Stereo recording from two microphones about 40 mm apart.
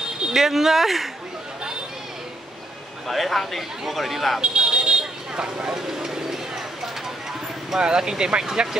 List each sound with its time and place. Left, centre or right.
0.3 s speech: centre
3.1 s speech: centre
4.4 s vehicle: right
7.7 s speech: centre